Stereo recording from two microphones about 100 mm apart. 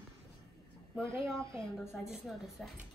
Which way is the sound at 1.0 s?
30° right (ahead or behind).